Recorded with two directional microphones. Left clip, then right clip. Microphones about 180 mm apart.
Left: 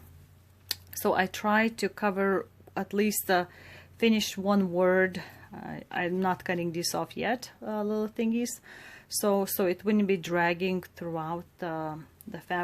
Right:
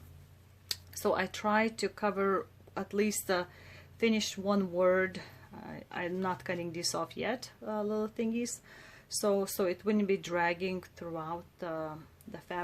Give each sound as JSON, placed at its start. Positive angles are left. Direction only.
{"t": 0.7, "sound": "speech", "side_deg": 35}